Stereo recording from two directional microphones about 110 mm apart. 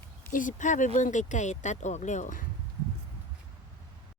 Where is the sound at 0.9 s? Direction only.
90° left.